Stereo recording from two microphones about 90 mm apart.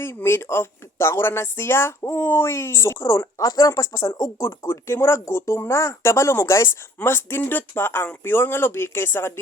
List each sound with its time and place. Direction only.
0.0 s speech: 25° left (ahead or behind)